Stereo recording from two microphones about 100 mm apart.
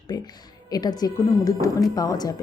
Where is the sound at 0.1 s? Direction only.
40° left (ahead or behind).